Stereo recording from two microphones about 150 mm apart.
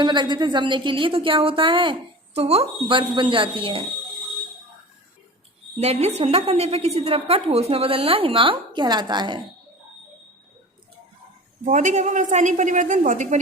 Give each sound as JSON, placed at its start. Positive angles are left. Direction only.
{"t": 0.0, "sound": "a woman's voice", "side_deg": -30}
{"t": 5.7, "sound": "a woman's voice", "side_deg": -45}
{"t": 11.6, "sound": "a woman's voice", "side_deg": -55}